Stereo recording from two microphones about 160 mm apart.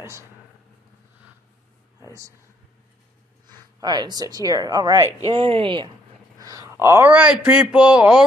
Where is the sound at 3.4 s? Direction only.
25° right (ahead or behind).